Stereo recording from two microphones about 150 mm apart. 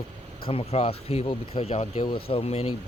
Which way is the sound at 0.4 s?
40° left (ahead or behind).